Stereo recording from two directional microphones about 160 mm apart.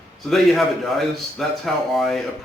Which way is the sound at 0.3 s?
Centre (ahead or behind).